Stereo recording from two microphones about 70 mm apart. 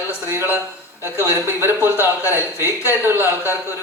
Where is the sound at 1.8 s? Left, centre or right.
Left.